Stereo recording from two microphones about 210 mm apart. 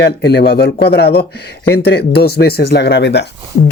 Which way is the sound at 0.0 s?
50° left (ahead or behind).